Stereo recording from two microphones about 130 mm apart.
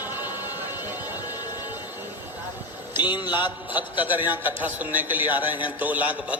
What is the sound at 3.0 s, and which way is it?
Speech, 35° left (ahead or behind).